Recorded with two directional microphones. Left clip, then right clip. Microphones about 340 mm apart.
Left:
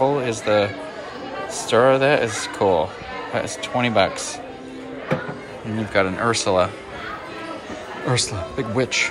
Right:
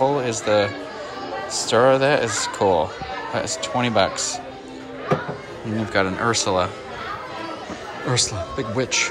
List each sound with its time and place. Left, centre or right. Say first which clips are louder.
0.0 s speech: even; centre
5.9 s speech: left 1 dB; centre
8.1 s speech: right 1 dB; centre